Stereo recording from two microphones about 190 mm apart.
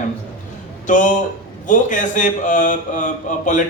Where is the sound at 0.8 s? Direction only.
40° left (ahead or behind).